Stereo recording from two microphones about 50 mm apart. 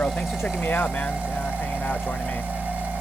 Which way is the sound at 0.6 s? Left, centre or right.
Left.